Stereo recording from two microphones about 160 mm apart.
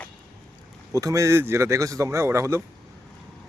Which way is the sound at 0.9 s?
20° right (ahead or behind).